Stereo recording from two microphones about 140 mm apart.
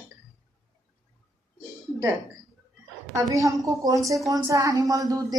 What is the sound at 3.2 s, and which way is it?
Speech, 25° right (ahead or behind).